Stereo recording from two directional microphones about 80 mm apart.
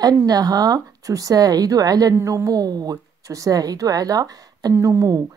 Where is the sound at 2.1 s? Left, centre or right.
Right.